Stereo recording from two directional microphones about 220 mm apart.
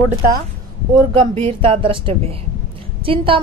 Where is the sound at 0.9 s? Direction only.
25° right (ahead or behind).